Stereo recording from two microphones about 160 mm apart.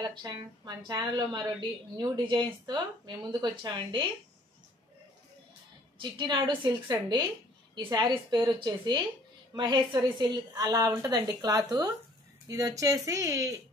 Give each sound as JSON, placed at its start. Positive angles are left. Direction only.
{"t": 0.0, "sound": "a woman's voice", "side_deg": -25}
{"t": 5.9, "sound": "a woman's voice", "side_deg": -30}